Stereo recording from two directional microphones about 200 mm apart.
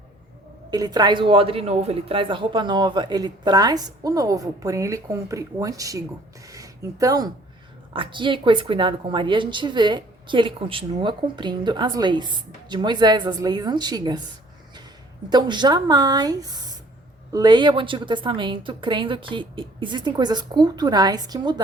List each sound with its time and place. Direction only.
0.7 s a woman's voice: 20° right (ahead or behind)
15.3 s a woman's voice: 20° right (ahead or behind)